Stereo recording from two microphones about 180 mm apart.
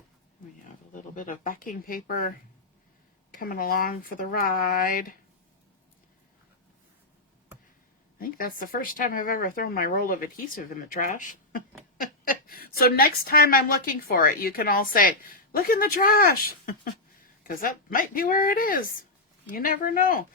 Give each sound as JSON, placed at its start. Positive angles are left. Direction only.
{"t": 0.9, "sound": "speech", "side_deg": 45}
{"t": 3.3, "sound": "speech", "side_deg": 50}
{"t": 8.2, "sound": "a woman's voice", "side_deg": 55}